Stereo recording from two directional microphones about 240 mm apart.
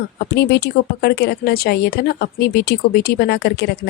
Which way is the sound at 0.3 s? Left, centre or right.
Left.